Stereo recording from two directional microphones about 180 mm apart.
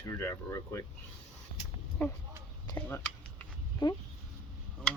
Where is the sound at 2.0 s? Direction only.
10° left (ahead or behind).